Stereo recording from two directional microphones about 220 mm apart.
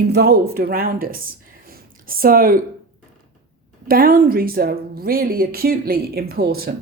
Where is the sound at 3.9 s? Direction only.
40° right (ahead or behind).